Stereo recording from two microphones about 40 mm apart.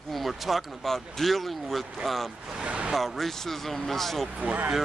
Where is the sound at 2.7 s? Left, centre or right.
Right.